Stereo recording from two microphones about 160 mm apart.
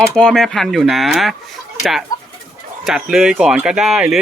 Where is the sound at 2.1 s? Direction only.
25° left (ahead or behind).